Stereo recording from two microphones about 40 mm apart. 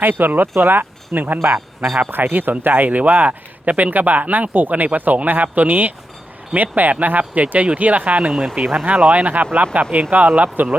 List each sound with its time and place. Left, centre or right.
0.0 s speech: right
0.4 s speech: right
0.7 s speech: right
1.4 s speech: right
2.0 s speech: right